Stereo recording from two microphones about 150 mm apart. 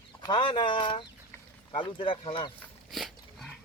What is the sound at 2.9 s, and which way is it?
Dog, centre (ahead or behind).